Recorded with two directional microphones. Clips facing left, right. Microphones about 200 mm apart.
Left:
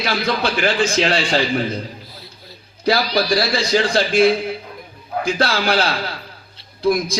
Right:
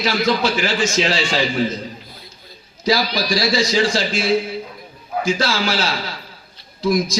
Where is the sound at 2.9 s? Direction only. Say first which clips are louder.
Left 2 dB; 60° left (ahead or behind).